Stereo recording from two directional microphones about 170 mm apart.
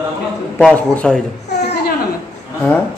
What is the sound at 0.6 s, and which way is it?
Speech, 5° left (ahead or behind).